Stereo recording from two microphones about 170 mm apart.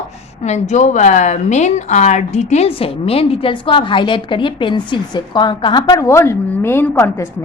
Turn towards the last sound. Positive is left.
turn(degrees=15)  # may be behind; listen again after turning